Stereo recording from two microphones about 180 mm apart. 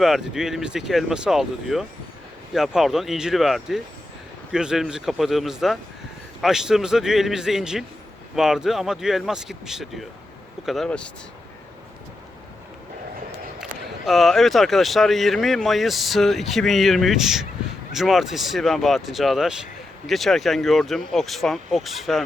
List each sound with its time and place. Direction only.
0.0 s speech: centre (ahead or behind)
13.6 s speech: centre (ahead or behind)